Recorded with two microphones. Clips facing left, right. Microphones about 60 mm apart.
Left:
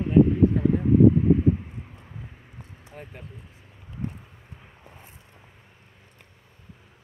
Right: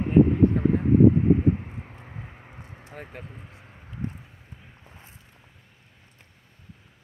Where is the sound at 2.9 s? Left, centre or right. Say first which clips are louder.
Right 2 dB; right.